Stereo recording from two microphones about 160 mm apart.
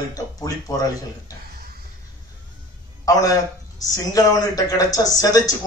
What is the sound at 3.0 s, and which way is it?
A man's voice, 20° left (ahead or behind).